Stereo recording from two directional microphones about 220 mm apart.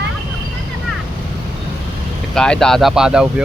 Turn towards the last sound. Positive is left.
turn(degrees=-5)  # may be behind; listen again after turning